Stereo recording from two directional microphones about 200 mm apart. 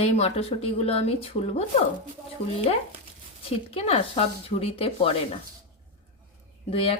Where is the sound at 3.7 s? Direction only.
30° left (ahead or behind).